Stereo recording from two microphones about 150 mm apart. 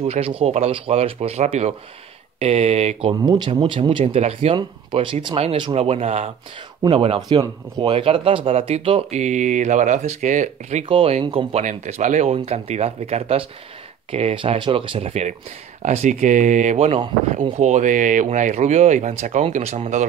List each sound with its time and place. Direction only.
0.0 s speech: 40° right (ahead or behind)
3.2 s speech: 25° right (ahead or behind); by 10.9 s 55° right (ahead or behind)
10.9 s speech: 40° right (ahead or behind)